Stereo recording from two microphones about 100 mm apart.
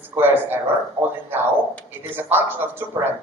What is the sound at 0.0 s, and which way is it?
Speech, 20° right (ahead or behind).